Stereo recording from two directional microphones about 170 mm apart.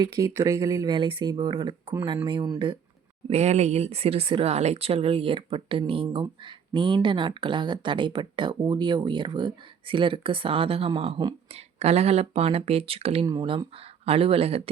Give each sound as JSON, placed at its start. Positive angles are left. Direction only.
{"t": 0.0, "sound": "speech", "side_deg": -15}
{"t": 0.9, "sound": "speech", "side_deg": -30}
{"t": 3.2, "sound": "speech", "side_deg": -40}